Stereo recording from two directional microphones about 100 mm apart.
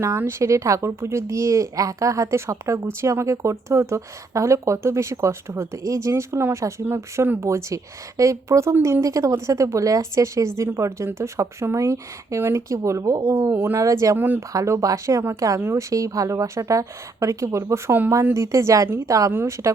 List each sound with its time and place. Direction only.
0.2 s speech: 25° right (ahead or behind)
14.2 s speech: 20° right (ahead or behind)
14.5 s speech: 35° right (ahead or behind)